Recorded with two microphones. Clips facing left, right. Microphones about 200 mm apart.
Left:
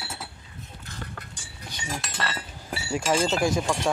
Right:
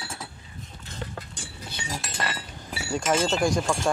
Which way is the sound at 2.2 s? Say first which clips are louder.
Right 1 dB; 15° right (ahead or behind).